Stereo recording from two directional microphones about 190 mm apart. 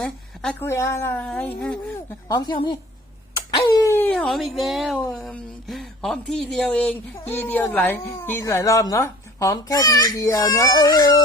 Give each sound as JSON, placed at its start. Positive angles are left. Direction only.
{"t": 0.0, "sound": "speech", "side_deg": 5}
{"t": 2.2, "sound": "a woman's voice", "side_deg": 20}
{"t": 3.8, "sound": "speech", "side_deg": 15}